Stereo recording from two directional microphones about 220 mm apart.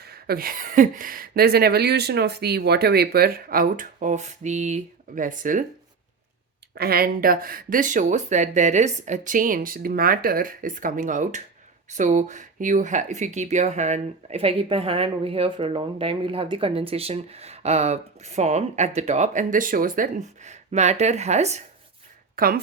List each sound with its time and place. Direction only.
0.0 s speech: 45° right (ahead or behind)
6.7 s speech: 45° right (ahead or behind)
22.4 s speech: 40° right (ahead or behind)